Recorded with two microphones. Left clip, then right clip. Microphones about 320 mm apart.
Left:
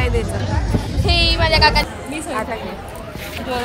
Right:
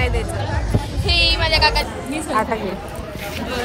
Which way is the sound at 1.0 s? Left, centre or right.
Centre.